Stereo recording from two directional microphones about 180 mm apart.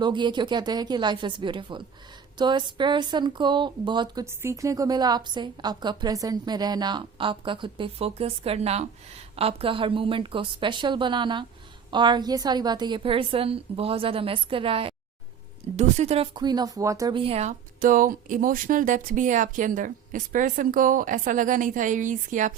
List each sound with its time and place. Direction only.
0.0 s a woman's voice: 25° right (ahead or behind)
17.7 s speech: 50° right (ahead or behind)